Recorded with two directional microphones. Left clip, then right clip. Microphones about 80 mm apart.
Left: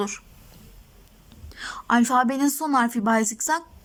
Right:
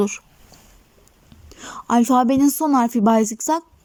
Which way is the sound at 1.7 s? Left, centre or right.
Right.